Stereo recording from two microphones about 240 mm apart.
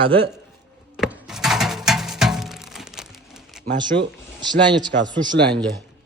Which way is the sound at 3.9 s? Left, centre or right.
Right.